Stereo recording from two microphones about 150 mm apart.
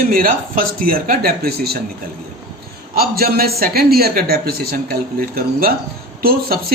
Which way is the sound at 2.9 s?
90° right.